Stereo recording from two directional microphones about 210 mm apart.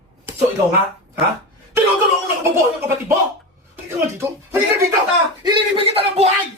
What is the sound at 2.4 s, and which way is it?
Speech, 10° right (ahead or behind).